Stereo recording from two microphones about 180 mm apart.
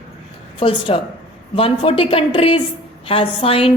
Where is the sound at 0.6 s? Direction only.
30° left (ahead or behind).